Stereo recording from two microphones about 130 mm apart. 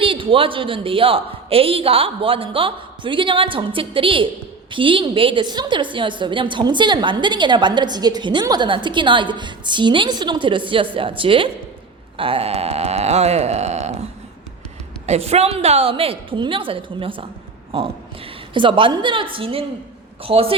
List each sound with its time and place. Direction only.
0.0 s a man's voice: 40° right (ahead or behind); by 14.0 s 55° right (ahead or behind)
15.0 s a man's voice: 55° right (ahead or behind)
18.5 s a woman's voice: 40° right (ahead or behind)